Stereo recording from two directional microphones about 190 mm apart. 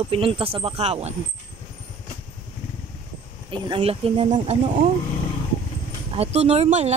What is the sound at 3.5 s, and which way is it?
Speech, 30° right (ahead or behind).